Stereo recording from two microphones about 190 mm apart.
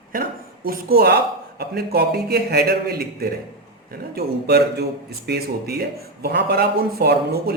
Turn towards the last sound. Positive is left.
turn(degrees=-55)  # may be behind; listen again after turning